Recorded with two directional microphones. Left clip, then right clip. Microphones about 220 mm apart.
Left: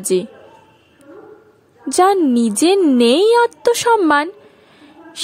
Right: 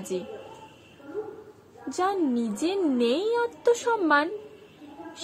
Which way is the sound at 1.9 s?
50° left (ahead or behind).